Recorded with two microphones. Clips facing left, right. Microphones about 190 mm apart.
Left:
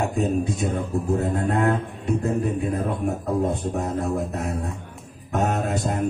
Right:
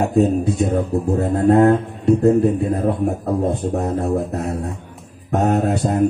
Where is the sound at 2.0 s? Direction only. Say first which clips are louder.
Right 10 dB; 35° right (ahead or behind).